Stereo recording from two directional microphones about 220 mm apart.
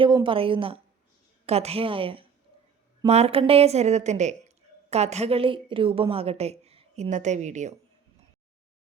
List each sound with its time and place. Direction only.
0.0 s a woman's voice: 20° right (ahead or behind)